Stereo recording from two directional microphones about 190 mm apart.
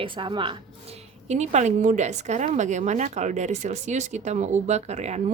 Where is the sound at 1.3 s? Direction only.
35° right (ahead or behind).